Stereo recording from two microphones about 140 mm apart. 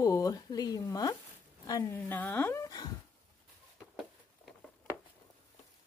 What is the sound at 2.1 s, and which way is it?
Dog, 15° left (ahead or behind).